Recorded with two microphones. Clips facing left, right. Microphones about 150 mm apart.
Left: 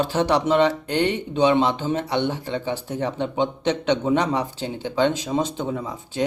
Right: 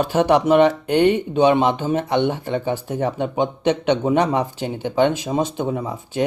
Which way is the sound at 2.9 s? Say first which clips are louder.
Right 3 dB; 45° right (ahead or behind).